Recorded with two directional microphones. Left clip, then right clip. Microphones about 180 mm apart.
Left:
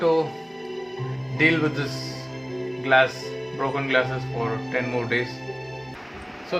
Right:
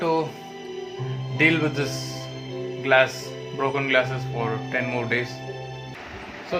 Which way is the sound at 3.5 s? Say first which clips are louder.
Right 1 dB; 30° right (ahead or behind).